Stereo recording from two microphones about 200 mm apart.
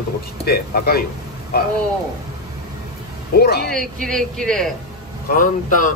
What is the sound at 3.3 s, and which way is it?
Speech, 50° left (ahead or behind).